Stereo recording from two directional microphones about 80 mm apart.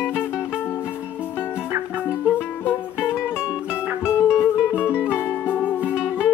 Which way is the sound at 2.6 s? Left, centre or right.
Left.